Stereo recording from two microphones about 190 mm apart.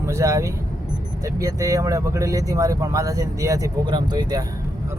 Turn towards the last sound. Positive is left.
turn(degrees=-20)  # may be behind; listen again after turning